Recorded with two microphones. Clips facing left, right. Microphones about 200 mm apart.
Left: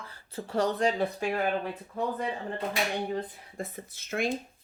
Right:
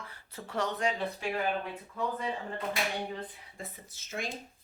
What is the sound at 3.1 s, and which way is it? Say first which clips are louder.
Speech: left 7 dB; 45° left (ahead or behind).